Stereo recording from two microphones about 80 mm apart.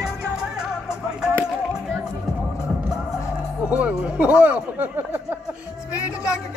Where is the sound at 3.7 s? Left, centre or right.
Centre.